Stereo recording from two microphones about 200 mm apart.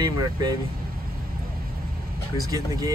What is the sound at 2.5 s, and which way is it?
Speech, 15° right (ahead or behind).